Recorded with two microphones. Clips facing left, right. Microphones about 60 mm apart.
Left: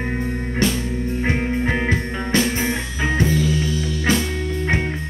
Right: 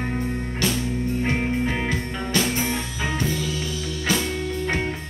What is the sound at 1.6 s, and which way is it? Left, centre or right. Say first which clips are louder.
Music: left 4 dB; left.